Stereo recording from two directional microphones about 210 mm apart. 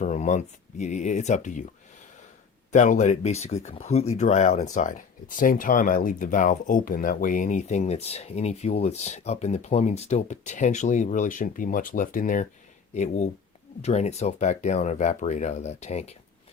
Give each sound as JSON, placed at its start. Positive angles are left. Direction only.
{"t": 0.0, "sound": "speech", "side_deg": 35}
{"t": 2.7, "sound": "speech", "side_deg": 35}